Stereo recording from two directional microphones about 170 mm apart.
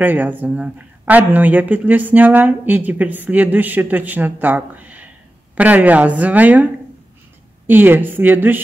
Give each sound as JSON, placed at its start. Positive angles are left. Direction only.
{"t": 0.0, "sound": "speech", "side_deg": -10}